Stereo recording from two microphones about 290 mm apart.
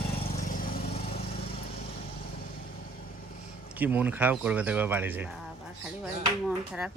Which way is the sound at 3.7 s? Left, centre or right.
Centre.